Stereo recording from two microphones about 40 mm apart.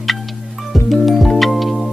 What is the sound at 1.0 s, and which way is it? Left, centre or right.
Music, centre.